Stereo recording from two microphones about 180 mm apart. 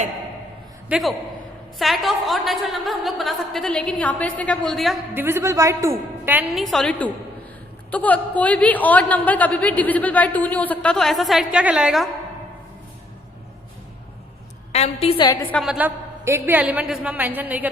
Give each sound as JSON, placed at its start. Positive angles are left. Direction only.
{"t": 0.9, "sound": "a man's voice", "side_deg": 0}
{"t": 5.1, "sound": "a woman's voice", "side_deg": -15}
{"t": 6.5, "sound": "a woman's voice", "side_deg": 0}
{"t": 14.7, "sound": "a woman's voice", "side_deg": 35}
{"t": 15.6, "sound": "a woman's voice", "side_deg": -5}